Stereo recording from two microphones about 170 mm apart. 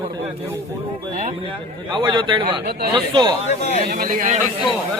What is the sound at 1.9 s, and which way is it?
Speech, 25° right (ahead or behind).